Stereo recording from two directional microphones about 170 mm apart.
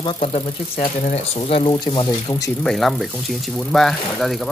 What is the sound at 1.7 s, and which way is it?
Speech, 25° left (ahead or behind).